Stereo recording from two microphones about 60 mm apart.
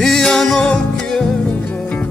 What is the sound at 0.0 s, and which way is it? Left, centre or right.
Music, centre.